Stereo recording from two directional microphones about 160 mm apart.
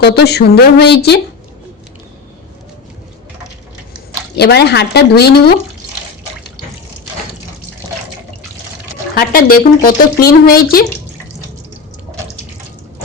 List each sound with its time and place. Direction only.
0.0 s speech: 90° left
4.4 s speech: 90° left
9.1 s speech: 65° left (ahead or behind)